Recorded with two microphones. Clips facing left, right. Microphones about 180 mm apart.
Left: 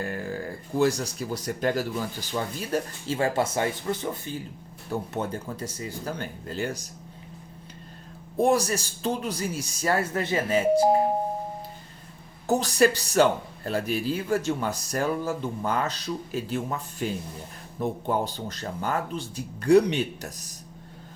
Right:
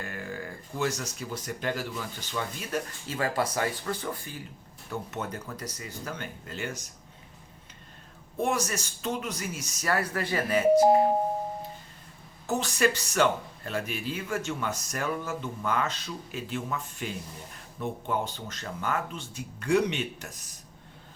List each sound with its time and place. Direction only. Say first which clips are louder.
0.0 s speech: left 6 dB; 35° left (ahead or behind)
8.4 s speech: left 6 dB; 35° left (ahead or behind)
12.5 s speech: left 5 dB; 35° left (ahead or behind)